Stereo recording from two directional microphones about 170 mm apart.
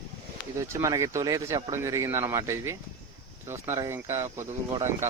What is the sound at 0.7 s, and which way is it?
Speech, 15° right (ahead or behind).